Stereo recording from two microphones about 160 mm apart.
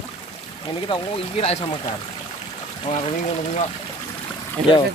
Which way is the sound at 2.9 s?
45° left (ahead or behind).